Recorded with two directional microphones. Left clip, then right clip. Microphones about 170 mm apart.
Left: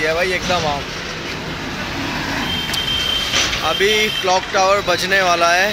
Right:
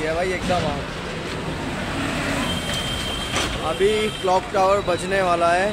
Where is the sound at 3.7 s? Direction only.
Centre (ahead or behind).